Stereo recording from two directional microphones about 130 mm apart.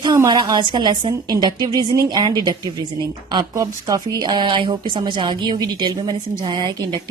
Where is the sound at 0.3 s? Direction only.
35° right (ahead or behind).